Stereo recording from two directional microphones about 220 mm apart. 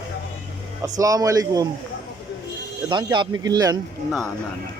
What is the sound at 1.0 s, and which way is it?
Speech, 15° right (ahead or behind).